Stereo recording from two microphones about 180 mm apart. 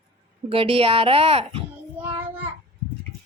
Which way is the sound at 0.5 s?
35° right (ahead or behind).